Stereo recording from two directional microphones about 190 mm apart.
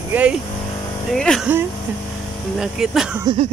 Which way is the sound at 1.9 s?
10° right (ahead or behind).